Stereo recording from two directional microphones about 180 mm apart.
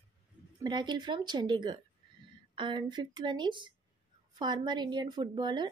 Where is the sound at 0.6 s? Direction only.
25° right (ahead or behind).